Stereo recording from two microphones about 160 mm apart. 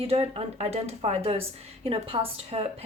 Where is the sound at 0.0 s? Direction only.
40° right (ahead or behind).